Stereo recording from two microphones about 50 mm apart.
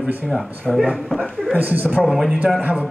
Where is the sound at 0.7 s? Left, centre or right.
Centre.